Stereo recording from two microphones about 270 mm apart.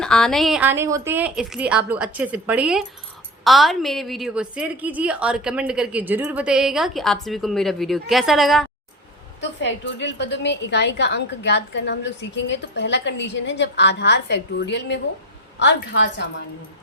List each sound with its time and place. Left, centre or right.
0.0 s a woman's voice: centre
9.4 s a woman's voice: left